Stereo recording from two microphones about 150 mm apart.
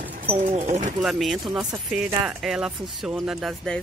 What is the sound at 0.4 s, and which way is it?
Speech, 45° right (ahead or behind).